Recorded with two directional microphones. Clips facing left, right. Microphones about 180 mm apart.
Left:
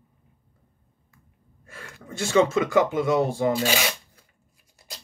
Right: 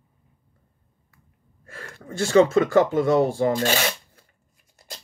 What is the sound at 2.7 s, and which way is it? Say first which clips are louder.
Speech: right 3 dB; 15° left (ahead or behind).